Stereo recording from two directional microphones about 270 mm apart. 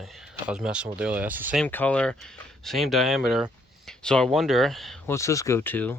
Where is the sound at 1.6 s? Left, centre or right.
Centre.